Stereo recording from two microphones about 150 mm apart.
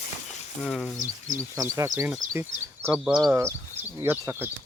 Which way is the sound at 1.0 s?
60° right (ahead or behind).